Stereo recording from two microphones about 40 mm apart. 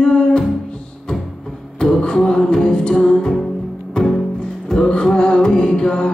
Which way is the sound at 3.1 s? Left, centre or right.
Centre.